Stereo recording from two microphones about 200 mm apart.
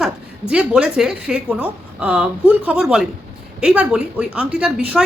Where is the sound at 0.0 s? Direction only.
5° right (ahead or behind).